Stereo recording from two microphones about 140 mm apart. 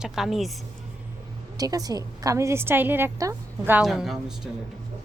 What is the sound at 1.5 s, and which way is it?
A woman's voice, 25° right (ahead or behind).